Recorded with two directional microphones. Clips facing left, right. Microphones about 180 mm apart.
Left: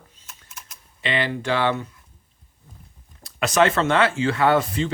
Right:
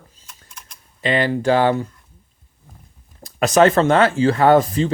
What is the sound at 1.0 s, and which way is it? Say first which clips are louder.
Speech: right 6 dB; 40° right (ahead or behind).